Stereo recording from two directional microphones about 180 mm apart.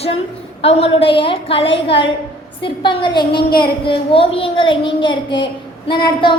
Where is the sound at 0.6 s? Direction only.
35° left (ahead or behind).